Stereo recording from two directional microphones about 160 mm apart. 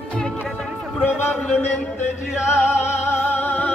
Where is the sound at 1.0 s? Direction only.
10° left (ahead or behind).